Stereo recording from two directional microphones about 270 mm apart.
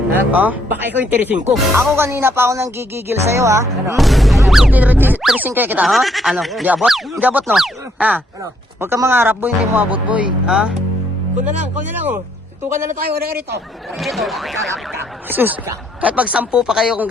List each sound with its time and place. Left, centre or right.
0.1 s speech: centre
3.9 s speech: centre
12.6 s speech: centre
14.0 s speech: centre